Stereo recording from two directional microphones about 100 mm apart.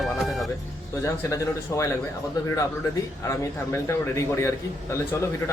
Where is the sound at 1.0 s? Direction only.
30° left (ahead or behind).